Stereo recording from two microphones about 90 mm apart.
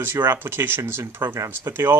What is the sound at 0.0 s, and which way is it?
Speech, 25° right (ahead or behind).